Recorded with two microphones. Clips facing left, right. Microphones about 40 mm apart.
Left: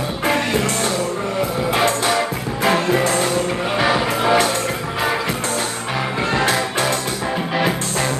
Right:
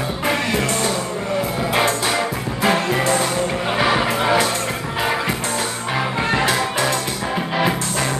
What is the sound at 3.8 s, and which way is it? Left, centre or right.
Music, centre.